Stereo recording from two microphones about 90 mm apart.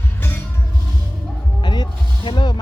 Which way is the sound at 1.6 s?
55° left (ahead or behind).